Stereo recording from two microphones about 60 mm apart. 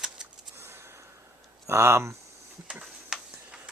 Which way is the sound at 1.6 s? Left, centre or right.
Right.